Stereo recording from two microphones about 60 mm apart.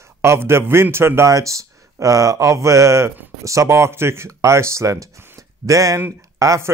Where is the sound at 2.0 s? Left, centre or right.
Right.